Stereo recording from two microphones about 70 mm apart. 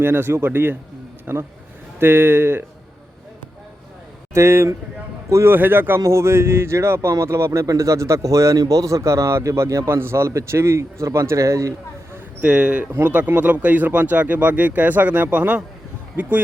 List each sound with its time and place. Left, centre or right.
0.0 s speech: right
4.4 s speech: right
6.0 s a man's voice: right
12.4 s speech: right